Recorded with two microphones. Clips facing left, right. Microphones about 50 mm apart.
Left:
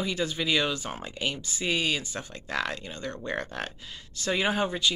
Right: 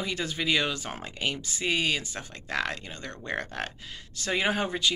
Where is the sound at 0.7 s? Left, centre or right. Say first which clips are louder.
Left 1 dB; right.